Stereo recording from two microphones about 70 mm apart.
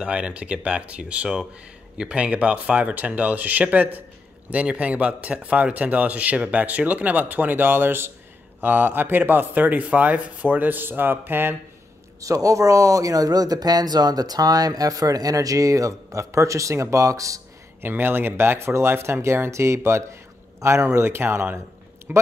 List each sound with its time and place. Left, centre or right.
0.0 s speech: centre
12.2 s speech: right
17.8 s speech: right
22.1 s speech: right